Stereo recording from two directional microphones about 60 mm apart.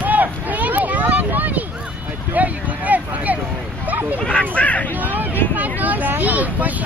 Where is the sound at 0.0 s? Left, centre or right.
Right.